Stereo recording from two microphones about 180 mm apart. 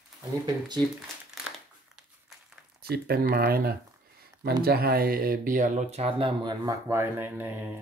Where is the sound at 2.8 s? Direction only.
60° right (ahead or behind).